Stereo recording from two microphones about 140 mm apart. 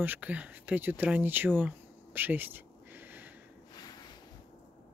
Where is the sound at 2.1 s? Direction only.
15° right (ahead or behind).